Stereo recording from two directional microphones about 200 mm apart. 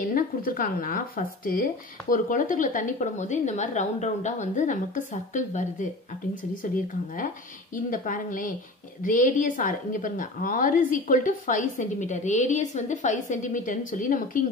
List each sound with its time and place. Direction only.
0.0 s speech: 45° left (ahead or behind)